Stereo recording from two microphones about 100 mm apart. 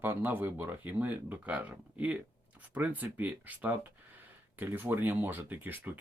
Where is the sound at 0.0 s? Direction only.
20° right (ahead or behind).